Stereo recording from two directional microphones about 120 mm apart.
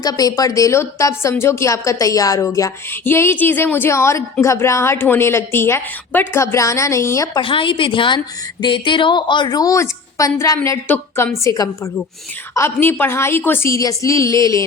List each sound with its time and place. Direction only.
0.0 s speech: 30° left (ahead or behind)
7.3 s a woman's voice: 45° left (ahead or behind); by 10.8 s 25° left (ahead or behind)
10.8 s a woman's voice: 15° left (ahead or behind)
11.4 s a woman's voice: 30° left (ahead or behind)